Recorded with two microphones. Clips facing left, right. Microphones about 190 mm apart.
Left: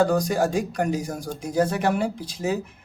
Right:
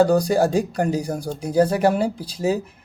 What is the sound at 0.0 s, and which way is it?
Speech, 35° right (ahead or behind).